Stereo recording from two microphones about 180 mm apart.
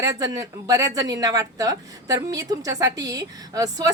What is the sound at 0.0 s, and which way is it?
A woman's voice, 20° right (ahead or behind).